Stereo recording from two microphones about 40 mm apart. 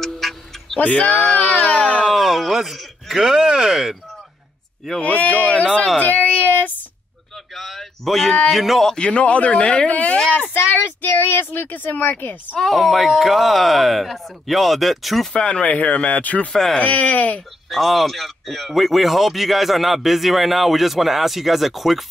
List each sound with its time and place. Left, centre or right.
0.0 s music: centre
0.7 s speech: left
1.2 s a sound: left
2.0 s speech: centre
3.2 s speech: centre
5.0 s speech: left
5.9 s a sound: left
7.5 s a sound: centre
8.5 s a man's voice: centre
9.0 s speech: left
10.8 s speech: left
12.5 s a man's voice: centre
15.3 s speech: left
17.6 s a man's voice: centre